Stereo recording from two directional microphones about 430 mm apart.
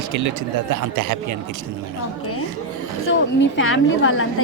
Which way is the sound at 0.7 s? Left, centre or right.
Right.